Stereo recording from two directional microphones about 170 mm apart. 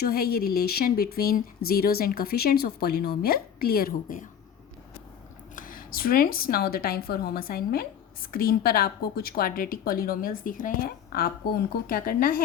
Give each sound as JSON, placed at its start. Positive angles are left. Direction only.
{"t": 0.0, "sound": "speech", "side_deg": 65}
{"t": 5.5, "sound": "speech", "side_deg": 55}